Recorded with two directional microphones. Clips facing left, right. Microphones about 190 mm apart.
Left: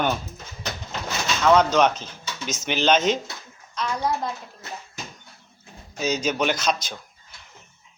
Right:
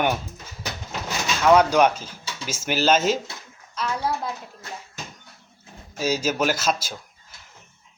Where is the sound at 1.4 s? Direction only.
10° right (ahead or behind).